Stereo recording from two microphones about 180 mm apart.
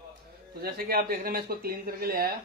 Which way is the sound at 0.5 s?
55° right (ahead or behind).